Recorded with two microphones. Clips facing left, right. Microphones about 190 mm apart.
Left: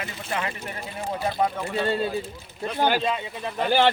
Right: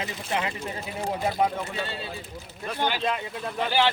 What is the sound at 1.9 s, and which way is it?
Speech, 50° left (ahead or behind).